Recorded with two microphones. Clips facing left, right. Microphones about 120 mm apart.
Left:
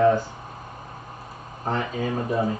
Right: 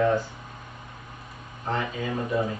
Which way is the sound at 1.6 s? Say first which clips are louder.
Left 3 dB; 40° left (ahead or behind).